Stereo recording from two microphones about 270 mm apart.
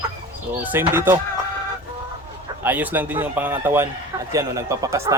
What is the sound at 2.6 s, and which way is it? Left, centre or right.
Speech, centre.